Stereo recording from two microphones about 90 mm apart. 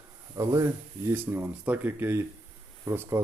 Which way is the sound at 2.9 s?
45° right (ahead or behind).